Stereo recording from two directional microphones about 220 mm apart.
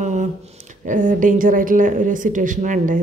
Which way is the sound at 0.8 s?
35° right (ahead or behind).